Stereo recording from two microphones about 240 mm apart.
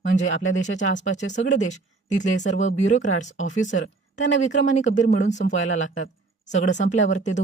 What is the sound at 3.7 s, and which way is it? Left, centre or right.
Speech, left.